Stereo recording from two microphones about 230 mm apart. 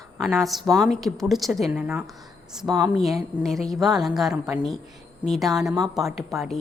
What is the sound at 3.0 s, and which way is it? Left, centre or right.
A woman's voice, centre.